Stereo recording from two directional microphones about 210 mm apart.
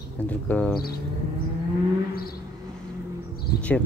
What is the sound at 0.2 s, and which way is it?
Speech, 5° left (ahead or behind).